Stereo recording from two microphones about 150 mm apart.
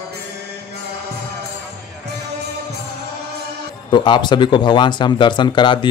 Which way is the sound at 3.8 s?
30° left (ahead or behind).